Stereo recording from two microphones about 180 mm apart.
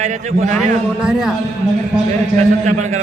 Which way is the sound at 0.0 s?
40° right (ahead or behind).